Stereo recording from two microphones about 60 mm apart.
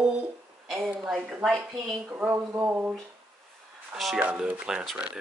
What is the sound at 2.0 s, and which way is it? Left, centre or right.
Speech, right.